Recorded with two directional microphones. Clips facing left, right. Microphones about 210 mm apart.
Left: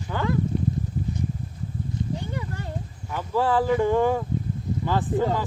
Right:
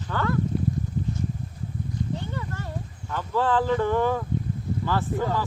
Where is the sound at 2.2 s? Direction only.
15° left (ahead or behind).